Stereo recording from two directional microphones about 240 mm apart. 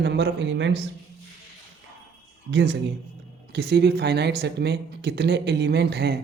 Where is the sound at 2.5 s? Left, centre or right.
Right.